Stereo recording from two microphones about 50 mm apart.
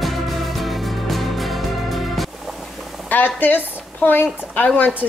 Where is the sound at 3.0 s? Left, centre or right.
Left.